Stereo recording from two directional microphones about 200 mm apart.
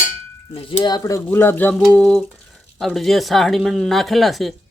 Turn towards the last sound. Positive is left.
turn(degrees=0)  # may be behind; listen again after turning